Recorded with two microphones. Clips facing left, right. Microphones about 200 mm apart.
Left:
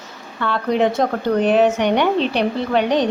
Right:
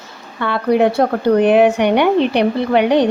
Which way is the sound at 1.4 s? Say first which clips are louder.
Right 4 dB; 60° right (ahead or behind).